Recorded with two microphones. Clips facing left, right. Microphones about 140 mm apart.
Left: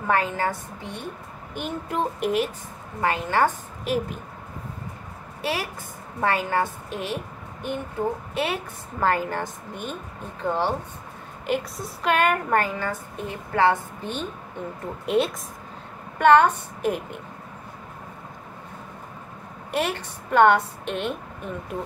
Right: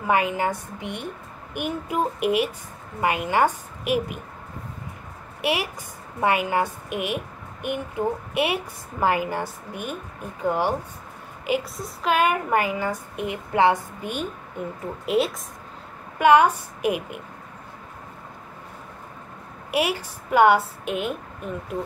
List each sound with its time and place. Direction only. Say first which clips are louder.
0.0 s a woman's voice: right 1 dB; 15° right (ahead or behind)
5.4 s a woman's voice: right 3 dB; 15° right (ahead or behind)
8.4 s a woman's voice: right 3 dB; 15° right (ahead or behind)
19.7 s a woman's voice: right 2 dB; 10° right (ahead or behind)